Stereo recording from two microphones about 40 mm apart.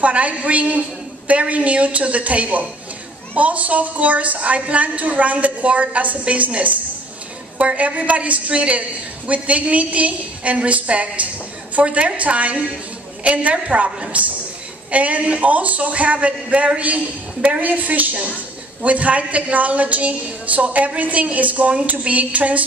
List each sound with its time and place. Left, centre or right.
0.0 s a woman's voice: right
17.6 s a woman's voice: right